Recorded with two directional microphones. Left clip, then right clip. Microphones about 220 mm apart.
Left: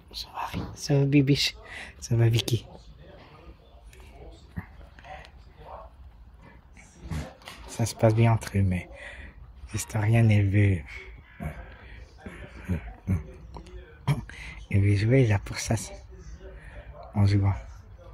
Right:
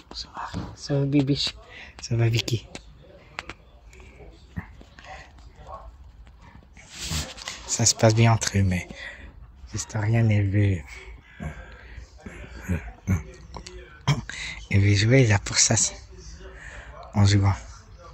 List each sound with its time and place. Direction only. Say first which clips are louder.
0.2 s speech: left 1 dB; 20° left (ahead or behind)
4.6 s dog: right 4 dB; centre (ahead or behind)
7.7 s speech: right 4 dB; centre (ahead or behind)
11.3 s crow: right 1 dB; centre (ahead or behind)
12.6 s throat clearing: right 4 dB; centre (ahead or behind)
16.5 s a sound: right 8 dB; 5° right (ahead or behind)